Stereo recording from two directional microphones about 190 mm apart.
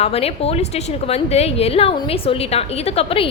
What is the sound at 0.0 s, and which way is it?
A woman's voice, 30° left (ahead or behind).